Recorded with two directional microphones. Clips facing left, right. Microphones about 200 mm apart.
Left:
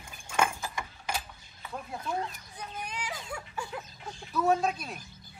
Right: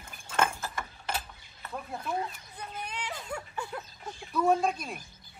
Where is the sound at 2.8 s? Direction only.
10° left (ahead or behind).